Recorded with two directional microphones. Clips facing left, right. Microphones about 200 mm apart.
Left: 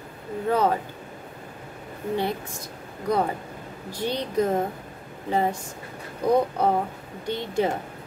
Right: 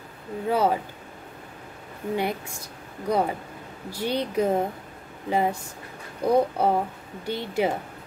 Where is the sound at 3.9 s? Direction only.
10° right (ahead or behind).